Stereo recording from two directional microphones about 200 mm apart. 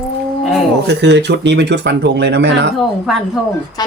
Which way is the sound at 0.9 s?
60° right (ahead or behind).